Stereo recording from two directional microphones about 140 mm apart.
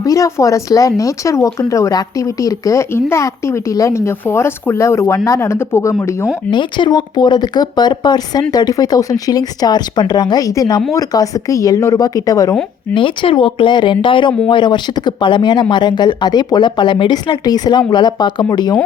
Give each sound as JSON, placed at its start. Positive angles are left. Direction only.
{"t": 0.0, "sound": "speech", "side_deg": 25}
{"t": 6.5, "sound": "speech", "side_deg": 35}
{"t": 12.9, "sound": "speech", "side_deg": 40}